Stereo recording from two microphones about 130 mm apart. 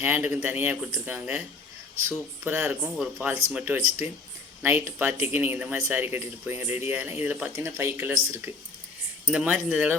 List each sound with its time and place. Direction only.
0.0 s speech: 15° right (ahead or behind)
9.2 s speech: 10° right (ahead or behind)